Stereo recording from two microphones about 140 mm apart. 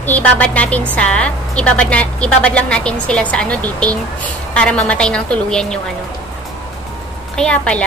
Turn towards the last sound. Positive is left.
turn(degrees=10)  # may be behind; listen again after turning